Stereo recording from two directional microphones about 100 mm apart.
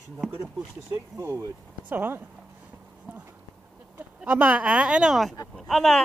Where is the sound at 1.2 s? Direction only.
30° right (ahead or behind).